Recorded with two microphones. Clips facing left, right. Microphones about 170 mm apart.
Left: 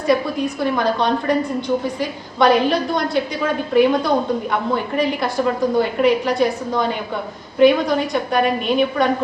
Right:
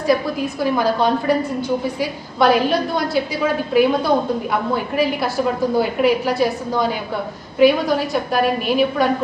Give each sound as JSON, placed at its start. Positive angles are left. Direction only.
{"t": 0.1, "sound": "a woman's voice", "side_deg": -5}